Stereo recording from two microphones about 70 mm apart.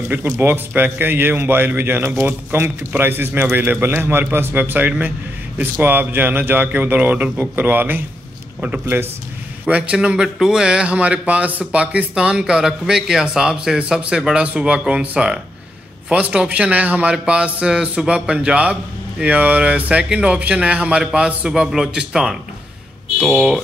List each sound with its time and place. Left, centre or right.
0.4 s a man's voice: right
9.7 s a man's voice: centre
23.2 s speech: centre